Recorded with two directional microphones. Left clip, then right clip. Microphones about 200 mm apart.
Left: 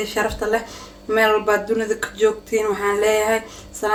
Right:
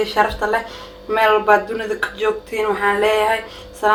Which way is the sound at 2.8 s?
60° left (ahead or behind).